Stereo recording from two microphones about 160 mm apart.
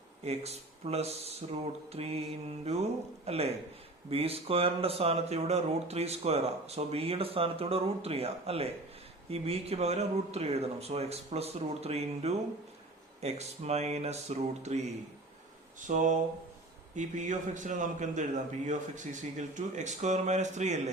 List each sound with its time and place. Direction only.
0.3 s speech: 40° right (ahead or behind)
3.2 s a man's voice: 40° right (ahead or behind)
15.9 s a man's voice: 50° right (ahead or behind)